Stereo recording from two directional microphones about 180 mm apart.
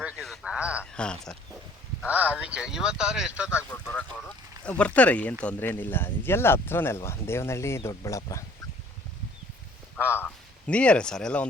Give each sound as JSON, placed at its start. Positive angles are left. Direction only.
{"t": 0.0, "sound": "a sound", "side_deg": -5}
{"t": 0.9, "sound": "speech", "side_deg": 5}
{"t": 2.0, "sound": "speech", "side_deg": -10}
{"t": 3.6, "sound": "speech", "side_deg": 10}
{"t": 10.2, "sound": "speech", "side_deg": 10}